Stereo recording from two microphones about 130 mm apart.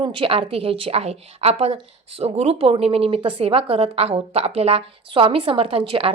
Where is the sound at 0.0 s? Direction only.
40° right (ahead or behind).